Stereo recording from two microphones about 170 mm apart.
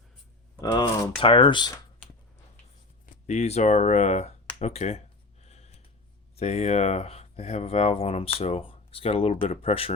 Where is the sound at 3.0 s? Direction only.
45° left (ahead or behind).